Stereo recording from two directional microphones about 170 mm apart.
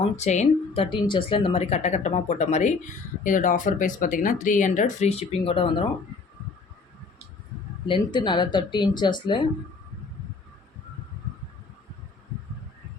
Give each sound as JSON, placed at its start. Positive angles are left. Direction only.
{"t": 0.2, "sound": "speech", "side_deg": 40}
{"t": 7.9, "sound": "speech", "side_deg": 30}